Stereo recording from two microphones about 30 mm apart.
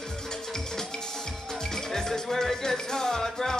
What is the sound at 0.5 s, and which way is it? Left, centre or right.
Music, centre.